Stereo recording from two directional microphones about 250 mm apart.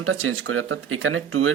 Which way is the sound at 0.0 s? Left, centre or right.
Right.